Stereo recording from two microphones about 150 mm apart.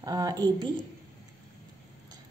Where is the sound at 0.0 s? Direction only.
25° right (ahead or behind).